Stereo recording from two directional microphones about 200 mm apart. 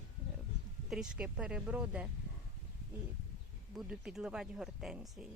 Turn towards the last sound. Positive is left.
turn(degrees=0)  # may be behind; listen again after turning